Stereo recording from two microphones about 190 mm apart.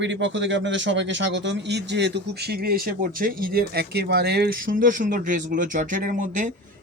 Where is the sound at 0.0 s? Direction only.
70° right (ahead or behind).